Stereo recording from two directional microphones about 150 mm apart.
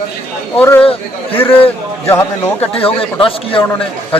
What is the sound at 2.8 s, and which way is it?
Speech, 40° left (ahead or behind).